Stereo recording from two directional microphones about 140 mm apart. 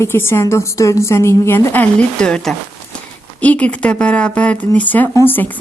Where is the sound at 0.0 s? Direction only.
15° left (ahead or behind).